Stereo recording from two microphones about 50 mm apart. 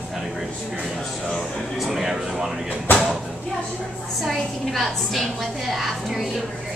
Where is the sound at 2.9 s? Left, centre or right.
Left.